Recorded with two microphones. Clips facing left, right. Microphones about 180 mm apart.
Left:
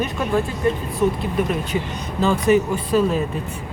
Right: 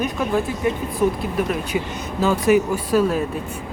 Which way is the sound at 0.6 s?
15° right (ahead or behind).